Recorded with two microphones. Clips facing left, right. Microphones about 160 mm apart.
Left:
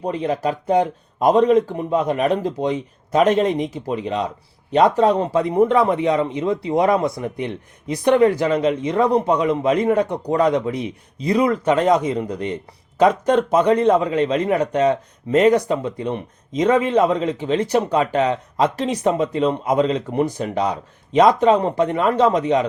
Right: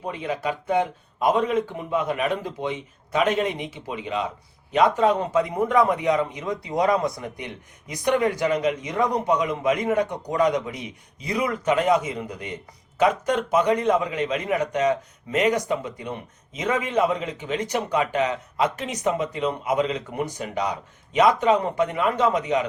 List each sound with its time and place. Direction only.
0.0 s a man's voice: 35° left (ahead or behind)